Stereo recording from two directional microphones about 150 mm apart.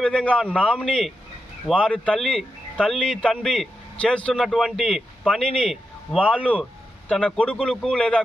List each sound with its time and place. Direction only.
0.0 s a man's voice: 5° left (ahead or behind)